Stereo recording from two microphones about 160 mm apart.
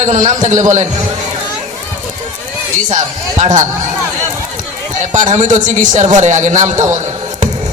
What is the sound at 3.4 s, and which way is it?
Speech, 50° right (ahead or behind).